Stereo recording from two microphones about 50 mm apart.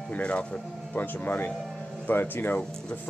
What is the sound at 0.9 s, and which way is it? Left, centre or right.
Speech, left.